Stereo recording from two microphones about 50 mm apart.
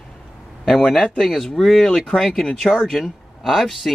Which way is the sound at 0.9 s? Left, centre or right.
Centre.